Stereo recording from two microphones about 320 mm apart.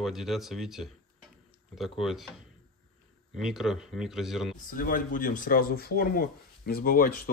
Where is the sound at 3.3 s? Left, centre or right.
Centre.